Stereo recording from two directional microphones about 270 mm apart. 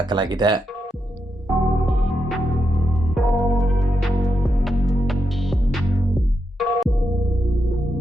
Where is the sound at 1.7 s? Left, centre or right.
Centre.